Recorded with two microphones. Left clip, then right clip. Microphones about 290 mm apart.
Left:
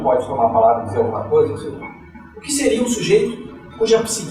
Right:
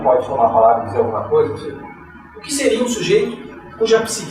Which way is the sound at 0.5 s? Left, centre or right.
Centre.